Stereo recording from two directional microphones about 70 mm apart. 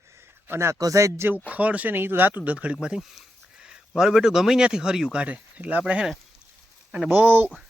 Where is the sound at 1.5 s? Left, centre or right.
Right.